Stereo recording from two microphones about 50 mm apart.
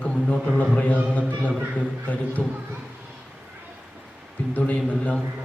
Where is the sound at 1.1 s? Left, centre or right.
Left.